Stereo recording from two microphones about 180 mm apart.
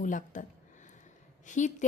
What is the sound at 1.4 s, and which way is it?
Speech, 45° left (ahead or behind).